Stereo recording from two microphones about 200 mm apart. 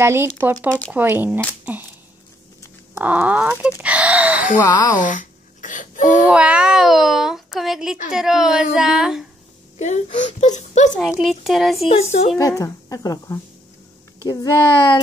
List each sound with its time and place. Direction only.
0.0 s speech: 10° right (ahead or behind)
0.7 s a child's voice: 5° left (ahead or behind)
0.9 s speech: 10° right (ahead or behind)
2.9 s speech: 10° right (ahead or behind)
4.6 s speech: 20° left (ahead or behind)
4.9 s a sound: 40° left (ahead or behind)
6.2 s a child's voice: 5° right (ahead or behind)
9.8 s speech: 35° left (ahead or behind)
11.0 s a child's voice: centre (ahead or behind)
11.9 s speech: 30° left (ahead or behind)
12.4 s speech: 15° left (ahead or behind)